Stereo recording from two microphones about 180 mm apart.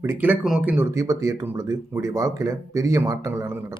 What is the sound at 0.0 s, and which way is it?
Speech, 10° right (ahead or behind).